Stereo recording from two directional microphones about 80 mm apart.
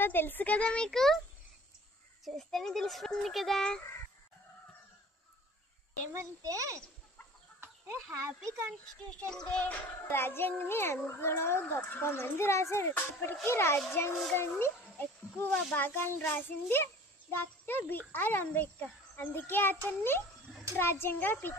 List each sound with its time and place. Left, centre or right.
0.0 s a child's voice: left; by 1.2 s centre
2.2 s a child's voice: centre
6.1 s a child's voice: right
7.6 s a child's voice: right
9.1 s a child's voice: centre
10.1 s a child's voice: left